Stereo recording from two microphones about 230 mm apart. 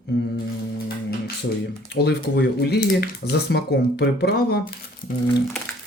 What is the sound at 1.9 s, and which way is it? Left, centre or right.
Speech, left.